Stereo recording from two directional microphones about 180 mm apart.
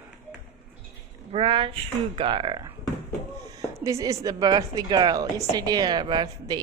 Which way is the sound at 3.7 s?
15° right (ahead or behind).